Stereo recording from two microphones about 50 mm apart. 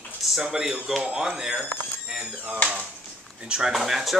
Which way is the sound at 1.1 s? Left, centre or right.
Centre.